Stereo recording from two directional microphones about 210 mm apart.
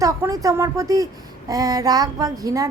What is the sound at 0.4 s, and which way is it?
Speech, 15° right (ahead or behind).